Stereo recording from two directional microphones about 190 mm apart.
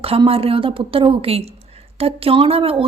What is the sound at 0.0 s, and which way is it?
A woman's voice, 30° right (ahead or behind).